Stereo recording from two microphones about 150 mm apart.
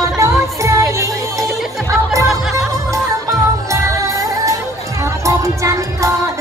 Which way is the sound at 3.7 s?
20° right (ahead or behind).